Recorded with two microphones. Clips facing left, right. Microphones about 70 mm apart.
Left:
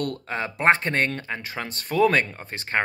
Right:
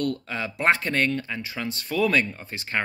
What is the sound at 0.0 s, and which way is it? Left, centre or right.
Speech, left.